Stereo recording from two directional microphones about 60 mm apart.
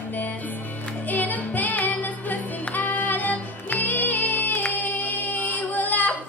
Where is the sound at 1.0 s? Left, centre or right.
Left.